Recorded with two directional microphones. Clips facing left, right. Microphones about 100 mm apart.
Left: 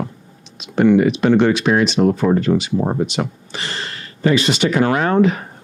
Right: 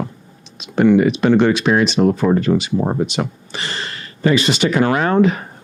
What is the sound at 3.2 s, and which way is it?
Speech, 15° right (ahead or behind).